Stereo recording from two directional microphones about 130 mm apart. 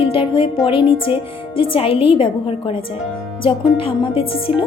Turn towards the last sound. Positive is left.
turn(degrees=45)  # may be behind; listen again after turning